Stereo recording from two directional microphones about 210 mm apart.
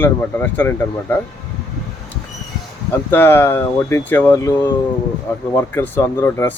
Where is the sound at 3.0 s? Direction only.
10° left (ahead or behind).